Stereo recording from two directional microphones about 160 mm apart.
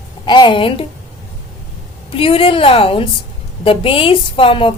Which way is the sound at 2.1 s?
35° left (ahead or behind).